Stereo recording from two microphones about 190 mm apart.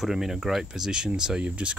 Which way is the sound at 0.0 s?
Centre (ahead or behind).